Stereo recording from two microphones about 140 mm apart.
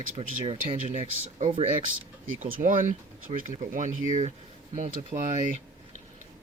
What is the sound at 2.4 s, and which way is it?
Speech, 65° right (ahead or behind).